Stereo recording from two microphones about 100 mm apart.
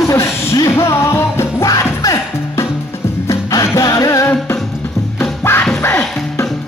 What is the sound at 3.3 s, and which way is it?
Music, 35° left (ahead or behind).